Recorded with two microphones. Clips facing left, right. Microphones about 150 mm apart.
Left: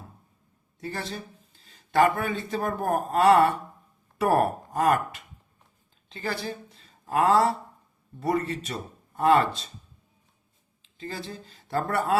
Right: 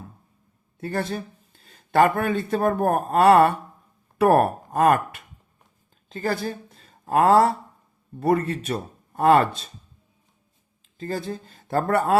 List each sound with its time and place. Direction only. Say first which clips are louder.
0.8 s a woman's voice: right 7 dB; 50° right (ahead or behind)
10.8 s speech: right 7 dB; 45° right (ahead or behind)